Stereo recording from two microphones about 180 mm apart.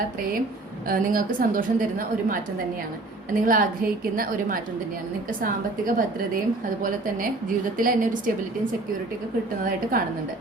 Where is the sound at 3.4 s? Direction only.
50° right (ahead or behind).